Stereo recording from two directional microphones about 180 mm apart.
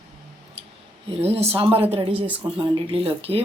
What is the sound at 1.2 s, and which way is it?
Speech, 35° right (ahead or behind).